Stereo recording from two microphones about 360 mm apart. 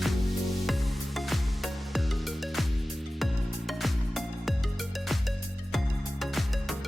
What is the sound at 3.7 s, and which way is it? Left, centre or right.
Music, centre.